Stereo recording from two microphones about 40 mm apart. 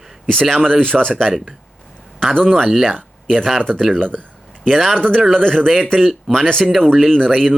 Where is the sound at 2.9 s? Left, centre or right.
Centre.